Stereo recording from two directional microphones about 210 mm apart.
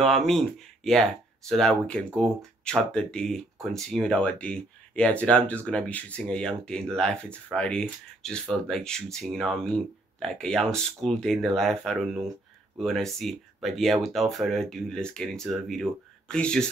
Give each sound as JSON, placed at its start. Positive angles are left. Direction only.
{"t": 0.0, "sound": "speech", "side_deg": 0}